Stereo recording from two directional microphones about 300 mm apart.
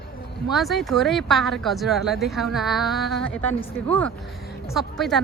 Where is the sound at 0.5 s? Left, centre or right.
Centre.